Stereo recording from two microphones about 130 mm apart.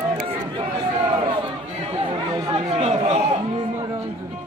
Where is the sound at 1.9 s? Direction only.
40° right (ahead or behind).